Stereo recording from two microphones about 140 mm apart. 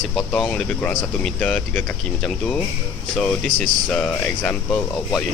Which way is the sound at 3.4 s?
65° right (ahead or behind).